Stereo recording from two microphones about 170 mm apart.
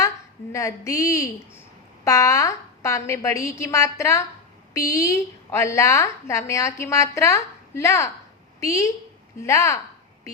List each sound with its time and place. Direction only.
0.5 s a woman's voice: 20° left (ahead or behind)